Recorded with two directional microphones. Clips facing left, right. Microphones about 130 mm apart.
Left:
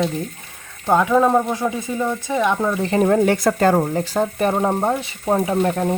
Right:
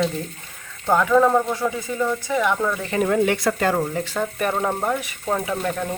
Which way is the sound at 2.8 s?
35° left (ahead or behind).